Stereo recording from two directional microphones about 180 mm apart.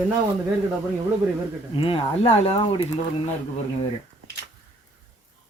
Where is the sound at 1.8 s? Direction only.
30° left (ahead or behind).